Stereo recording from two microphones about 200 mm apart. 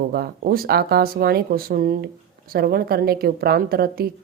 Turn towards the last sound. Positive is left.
turn(degrees=-50)  # may be behind; listen again after turning